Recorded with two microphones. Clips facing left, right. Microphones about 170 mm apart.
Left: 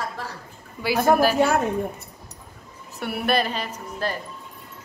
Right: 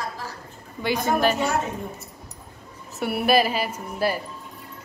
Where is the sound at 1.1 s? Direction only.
55° left (ahead or behind).